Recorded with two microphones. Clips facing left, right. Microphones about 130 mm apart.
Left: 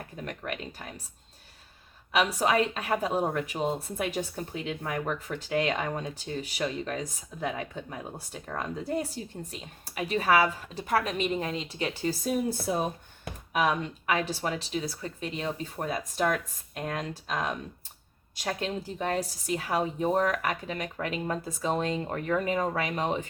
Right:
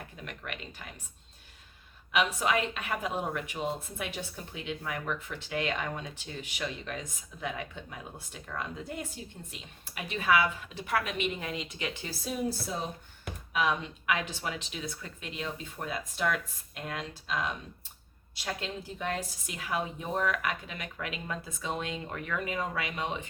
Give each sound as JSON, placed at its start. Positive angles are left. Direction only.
{"t": 0.3, "sound": "a woman's voice", "side_deg": 40}
{"t": 2.1, "sound": "a woman's voice", "side_deg": 35}